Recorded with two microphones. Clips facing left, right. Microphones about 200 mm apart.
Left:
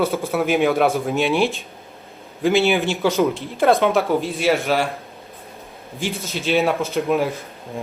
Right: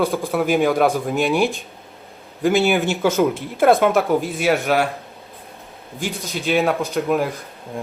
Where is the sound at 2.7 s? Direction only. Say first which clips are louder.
Right 1 dB; centre (ahead or behind).